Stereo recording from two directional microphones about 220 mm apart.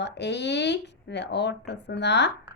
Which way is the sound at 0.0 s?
50° left (ahead or behind).